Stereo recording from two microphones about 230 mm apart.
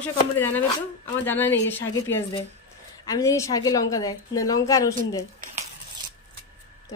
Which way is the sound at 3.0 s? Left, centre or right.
Centre.